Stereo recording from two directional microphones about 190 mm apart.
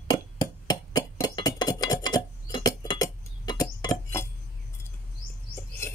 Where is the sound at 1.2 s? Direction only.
20° left (ahead or behind).